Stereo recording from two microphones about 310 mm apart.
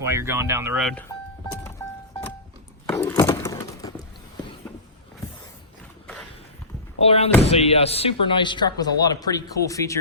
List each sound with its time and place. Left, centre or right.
0.0 s speech: centre
2.8 s a sound: centre
7.0 s speech: centre